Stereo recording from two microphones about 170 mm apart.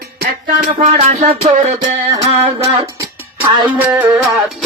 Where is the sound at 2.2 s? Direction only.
35° right (ahead or behind).